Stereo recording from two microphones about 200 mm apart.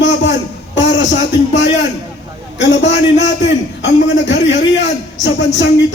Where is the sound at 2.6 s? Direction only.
65° left (ahead or behind).